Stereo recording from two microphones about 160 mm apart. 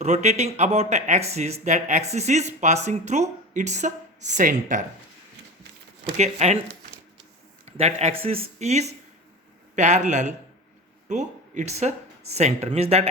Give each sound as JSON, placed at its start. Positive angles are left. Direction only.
{"t": 0.0, "sound": "speech", "side_deg": -45}
{"t": 6.1, "sound": "speech", "side_deg": -45}
{"t": 7.6, "sound": "a man's voice", "side_deg": -45}